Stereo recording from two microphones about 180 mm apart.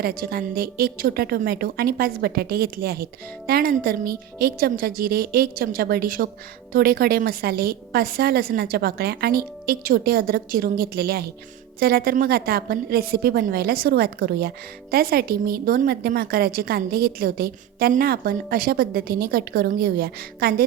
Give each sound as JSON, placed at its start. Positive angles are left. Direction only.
{"t": 0.0, "sound": "a woman's voice", "side_deg": -55}